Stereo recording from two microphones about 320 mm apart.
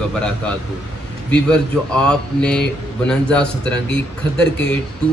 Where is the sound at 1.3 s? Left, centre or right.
Centre.